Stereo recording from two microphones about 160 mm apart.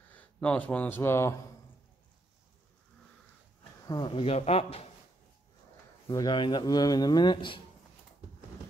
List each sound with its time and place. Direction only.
0.1 s speech: 10° left (ahead or behind)
3.8 s speech: 25° left (ahead or behind)
6.0 s speech: 30° left (ahead or behind)